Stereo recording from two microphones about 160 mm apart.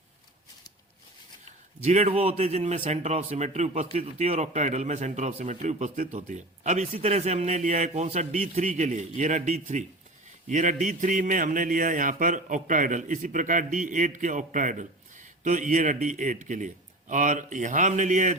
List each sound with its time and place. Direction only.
1.8 s speech: 45° right (ahead or behind)